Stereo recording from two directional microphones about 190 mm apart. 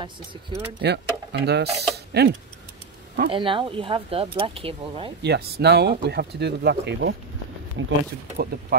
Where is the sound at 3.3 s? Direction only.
25° right (ahead or behind).